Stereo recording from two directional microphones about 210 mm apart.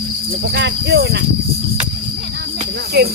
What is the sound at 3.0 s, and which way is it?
Speech, 55° right (ahead or behind).